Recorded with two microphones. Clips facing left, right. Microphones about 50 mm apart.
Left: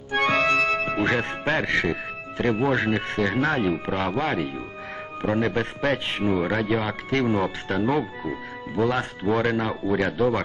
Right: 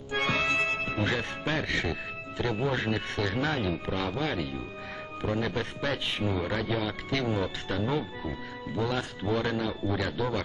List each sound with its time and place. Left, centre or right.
0.1 s music: left
2.4 s speech: left